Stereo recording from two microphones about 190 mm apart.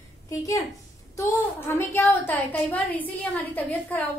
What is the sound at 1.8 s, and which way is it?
A woman's voice, 10° left (ahead or behind).